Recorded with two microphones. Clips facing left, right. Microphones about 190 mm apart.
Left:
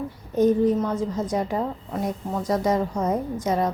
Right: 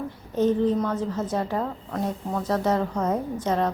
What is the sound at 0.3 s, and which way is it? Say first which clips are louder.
A woman's voice: left 2 dB; 10° left (ahead or behind).